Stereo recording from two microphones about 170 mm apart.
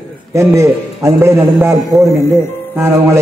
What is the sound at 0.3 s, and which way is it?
A man's voice, 15° right (ahead or behind).